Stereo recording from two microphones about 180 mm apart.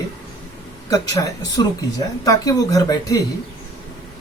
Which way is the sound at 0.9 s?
20° left (ahead or behind).